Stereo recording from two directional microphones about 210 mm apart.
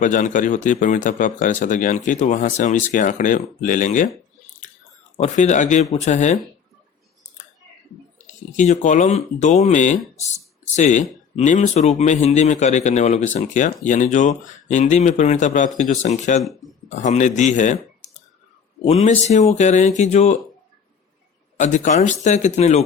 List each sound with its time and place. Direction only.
0.0 s speech: 40° left (ahead or behind)
5.1 s speech: 35° left (ahead or behind)
8.5 s speech: 35° left (ahead or behind)
16.4 s speech: centre (ahead or behind)
16.9 s speech: 35° left (ahead or behind)
21.6 s speech: 35° left (ahead or behind)